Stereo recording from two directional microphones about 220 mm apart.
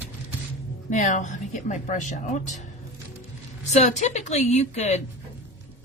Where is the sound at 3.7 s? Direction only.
30° left (ahead or behind).